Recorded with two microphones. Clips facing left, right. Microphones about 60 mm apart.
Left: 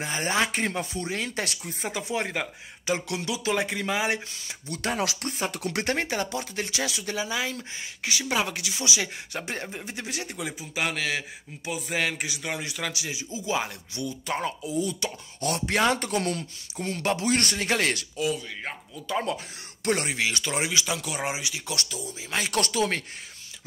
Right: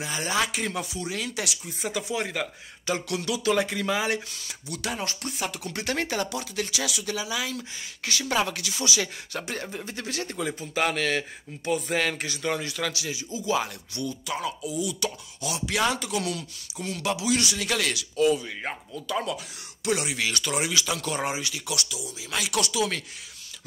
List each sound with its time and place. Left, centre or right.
0.0 s speech: left
1.9 s speech: left
4.6 s speech: left
5.5 s speech: left
5.9 s speech: left
14.2 s speech: left
15.4 s speech: left
17.6 s speech: left
18.2 s speech: centre
19.0 s speech: left
19.8 s speech: left
20.2 s speech: left
20.8 s speech: centre
21.6 s speech: left